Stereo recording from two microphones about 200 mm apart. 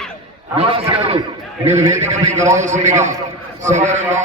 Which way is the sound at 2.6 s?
35° right (ahead or behind).